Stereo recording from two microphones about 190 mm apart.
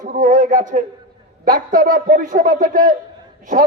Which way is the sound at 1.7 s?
45° right (ahead or behind).